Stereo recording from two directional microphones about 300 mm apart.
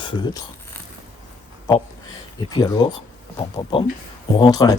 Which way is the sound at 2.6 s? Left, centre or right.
Centre.